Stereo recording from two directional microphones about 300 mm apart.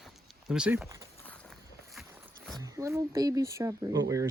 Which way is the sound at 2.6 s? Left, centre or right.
Centre.